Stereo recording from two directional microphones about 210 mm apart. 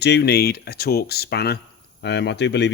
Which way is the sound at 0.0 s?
50° left (ahead or behind).